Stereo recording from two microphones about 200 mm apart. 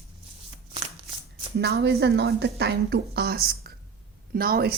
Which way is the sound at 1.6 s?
55° right (ahead or behind).